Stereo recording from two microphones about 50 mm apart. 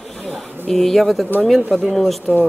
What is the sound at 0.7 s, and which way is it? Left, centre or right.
Speech, centre.